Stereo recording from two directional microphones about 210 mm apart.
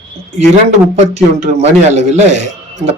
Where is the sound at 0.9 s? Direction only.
35° right (ahead or behind).